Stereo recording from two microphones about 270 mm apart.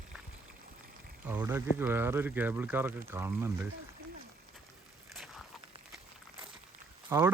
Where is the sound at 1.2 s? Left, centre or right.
Centre.